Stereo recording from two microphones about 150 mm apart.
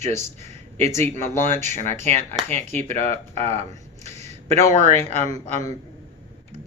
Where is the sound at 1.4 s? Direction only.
50° right (ahead or behind).